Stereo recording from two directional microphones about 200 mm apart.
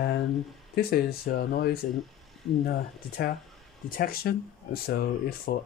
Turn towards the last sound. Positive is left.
turn(degrees=50)  # may be behind; listen again after turning